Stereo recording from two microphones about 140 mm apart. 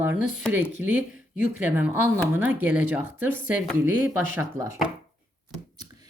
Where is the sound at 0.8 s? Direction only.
10° right (ahead or behind).